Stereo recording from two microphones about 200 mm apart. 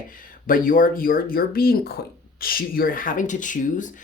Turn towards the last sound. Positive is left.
turn(degrees=40)  # may be behind; listen again after turning